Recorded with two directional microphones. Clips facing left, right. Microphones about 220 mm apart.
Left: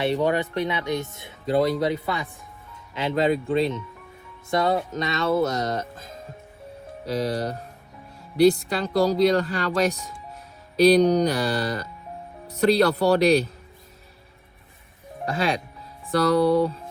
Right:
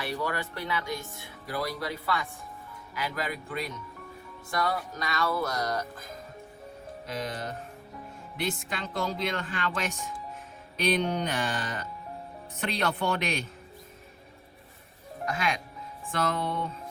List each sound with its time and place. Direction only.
0.0 s speech: 20° left (ahead or behind)
15.3 s speech: 30° left (ahead or behind)